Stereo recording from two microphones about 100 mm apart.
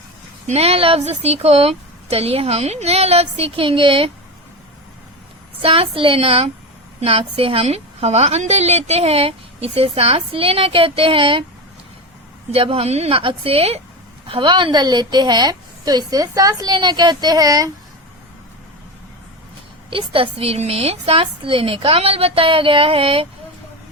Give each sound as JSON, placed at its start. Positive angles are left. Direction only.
{"t": 0.5, "sound": "a woman's voice", "side_deg": -85}
{"t": 5.6, "sound": "a woman's voice", "side_deg": -70}
{"t": 12.5, "sound": "a woman's voice", "side_deg": -75}
{"t": 14.3, "sound": "a woman's voice", "side_deg": -55}
{"t": 19.9, "sound": "a woman's voice", "side_deg": -60}